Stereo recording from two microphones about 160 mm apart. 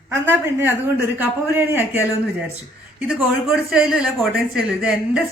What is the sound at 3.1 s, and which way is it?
Speech, 5° right (ahead or behind).